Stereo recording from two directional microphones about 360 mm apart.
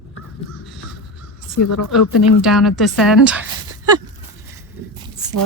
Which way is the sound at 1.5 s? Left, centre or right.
Left.